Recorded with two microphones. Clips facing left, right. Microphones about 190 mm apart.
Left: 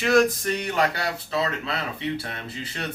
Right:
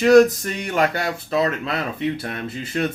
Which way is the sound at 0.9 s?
50° right (ahead or behind).